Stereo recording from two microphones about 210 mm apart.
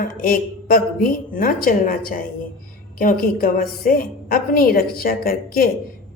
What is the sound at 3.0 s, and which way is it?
A woman's voice, 40° left (ahead or behind).